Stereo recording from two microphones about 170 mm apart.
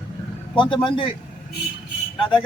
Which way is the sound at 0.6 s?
30° left (ahead or behind).